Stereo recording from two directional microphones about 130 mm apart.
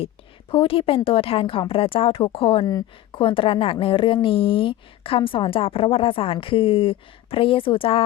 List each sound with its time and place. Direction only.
0.5 s a woman's voice: 45° left (ahead or behind)